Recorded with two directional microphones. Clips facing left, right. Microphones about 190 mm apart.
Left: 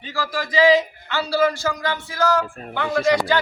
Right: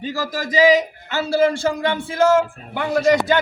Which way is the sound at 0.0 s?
40° right (ahead or behind).